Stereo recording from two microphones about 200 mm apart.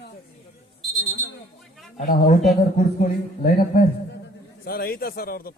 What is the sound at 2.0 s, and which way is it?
A man's voice, 40° left (ahead or behind).